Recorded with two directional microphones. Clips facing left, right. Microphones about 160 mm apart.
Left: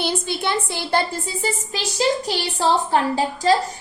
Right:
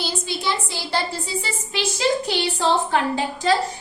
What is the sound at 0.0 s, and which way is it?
A woman's voice, 60° left (ahead or behind).